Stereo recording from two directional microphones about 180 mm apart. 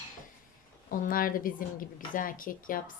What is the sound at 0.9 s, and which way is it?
Speech, 50° left (ahead or behind).